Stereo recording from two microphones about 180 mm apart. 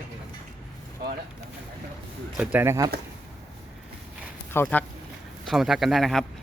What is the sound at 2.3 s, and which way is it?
Speech, 10° right (ahead or behind).